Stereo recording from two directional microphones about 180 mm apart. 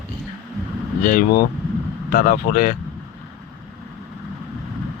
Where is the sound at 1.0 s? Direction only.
55° left (ahead or behind).